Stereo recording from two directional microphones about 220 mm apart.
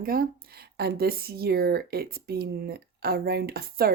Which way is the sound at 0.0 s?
40° right (ahead or behind).